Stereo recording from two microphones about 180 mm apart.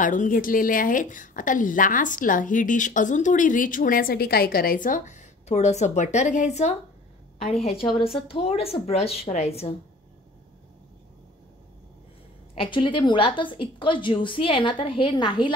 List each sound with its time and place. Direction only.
0.0 s a woman's voice: 45° left (ahead or behind)
8.3 s a woman's voice: 35° left (ahead or behind)
12.5 s a woman's voice: 25° left (ahead or behind)